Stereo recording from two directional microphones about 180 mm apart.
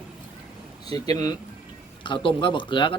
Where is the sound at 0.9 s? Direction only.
20° left (ahead or behind).